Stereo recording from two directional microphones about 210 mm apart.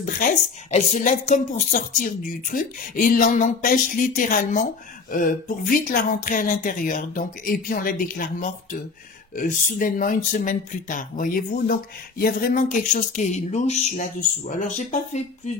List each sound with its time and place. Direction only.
0.0 s a woman's voice: 40° left (ahead or behind)